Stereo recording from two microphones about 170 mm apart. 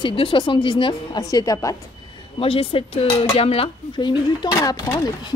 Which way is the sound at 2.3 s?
35° left (ahead or behind).